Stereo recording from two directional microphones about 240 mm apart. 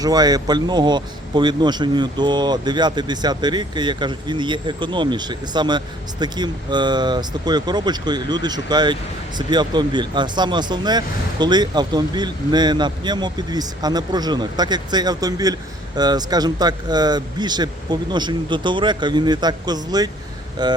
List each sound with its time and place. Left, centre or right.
0.0 s speech: centre